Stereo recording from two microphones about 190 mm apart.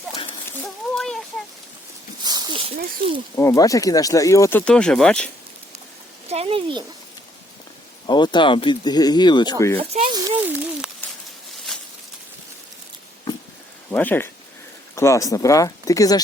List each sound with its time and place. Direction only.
0.6 s a sound: centre (ahead or behind)
2.2 s a sound: 20° right (ahead or behind)
3.3 s speech: 15° left (ahead or behind)
6.2 s speech: 30° right (ahead or behind)
8.0 s speech: 25° left (ahead or behind)
9.7 s speech: 35° right (ahead or behind)
10.1 s speech: 20° right (ahead or behind)
11.7 s a sound: 5° left (ahead or behind)
13.9 s speech: 10° left (ahead or behind)